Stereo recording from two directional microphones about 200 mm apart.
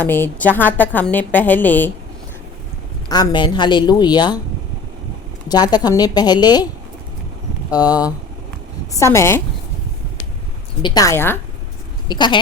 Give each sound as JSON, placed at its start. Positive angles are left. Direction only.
{"t": 0.0, "sound": "a woman's voice", "side_deg": 10}
{"t": 3.1, "sound": "a woman's voice", "side_deg": 20}
{"t": 5.5, "sound": "a woman's voice", "side_deg": 20}
{"t": 7.7, "sound": "a woman's voice", "side_deg": 20}
{"t": 10.8, "sound": "a woman's voice", "side_deg": 15}
{"t": 12.0, "sound": "a woman's voice", "side_deg": 20}